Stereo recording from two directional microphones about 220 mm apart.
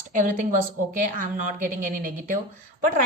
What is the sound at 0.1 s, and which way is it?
A woman's voice, 35° right (ahead or behind).